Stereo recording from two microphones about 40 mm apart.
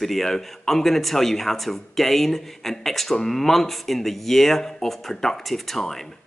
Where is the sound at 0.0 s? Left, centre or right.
Centre.